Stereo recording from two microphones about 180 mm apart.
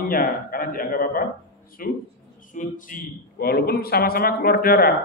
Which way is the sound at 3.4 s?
60° left (ahead or behind).